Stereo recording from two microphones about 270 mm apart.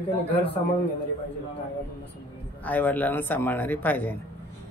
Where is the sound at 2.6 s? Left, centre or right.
Centre.